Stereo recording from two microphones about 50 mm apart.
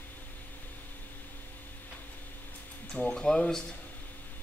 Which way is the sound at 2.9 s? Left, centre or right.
Centre.